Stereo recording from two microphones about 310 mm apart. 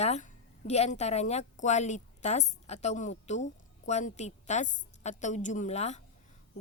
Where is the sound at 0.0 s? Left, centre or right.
Left.